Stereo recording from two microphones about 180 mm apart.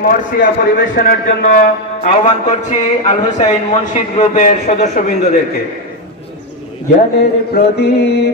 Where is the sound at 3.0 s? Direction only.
40° left (ahead or behind).